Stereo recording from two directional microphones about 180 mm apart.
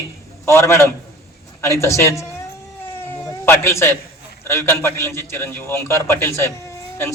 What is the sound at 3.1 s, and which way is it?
Cat, 10° left (ahead or behind).